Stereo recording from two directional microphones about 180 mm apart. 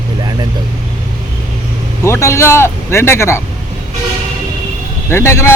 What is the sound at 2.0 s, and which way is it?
A man's voice, 15° left (ahead or behind).